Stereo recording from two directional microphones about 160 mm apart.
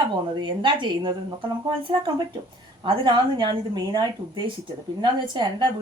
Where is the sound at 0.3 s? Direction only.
30° right (ahead or behind).